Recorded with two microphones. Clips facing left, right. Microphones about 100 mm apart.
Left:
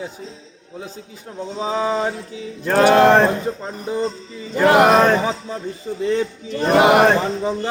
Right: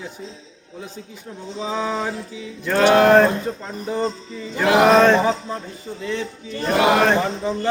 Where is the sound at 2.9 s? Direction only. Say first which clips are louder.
Right 1 dB; 25° left (ahead or behind).